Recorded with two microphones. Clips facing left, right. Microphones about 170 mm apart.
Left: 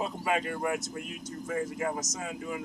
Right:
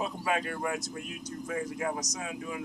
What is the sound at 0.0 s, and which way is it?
Speech, 5° left (ahead or behind).